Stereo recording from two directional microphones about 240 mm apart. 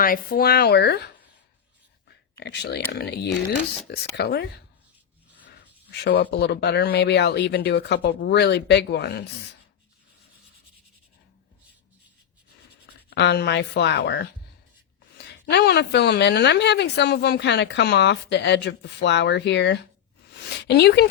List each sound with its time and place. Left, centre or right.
0.0 s speech: left
2.4 s a woman's voice: left
5.9 s a woman's voice: left
12.8 s speech: left
15.3 s a woman's voice: left
20.3 s a sound: left